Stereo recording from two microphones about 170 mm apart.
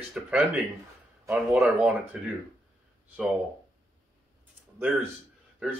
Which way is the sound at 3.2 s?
5° right (ahead or behind).